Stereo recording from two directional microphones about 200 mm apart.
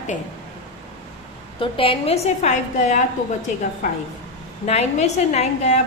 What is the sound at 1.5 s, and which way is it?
A woman's voice, 25° left (ahead or behind).